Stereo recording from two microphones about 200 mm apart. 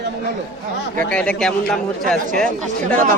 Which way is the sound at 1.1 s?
5° left (ahead or behind).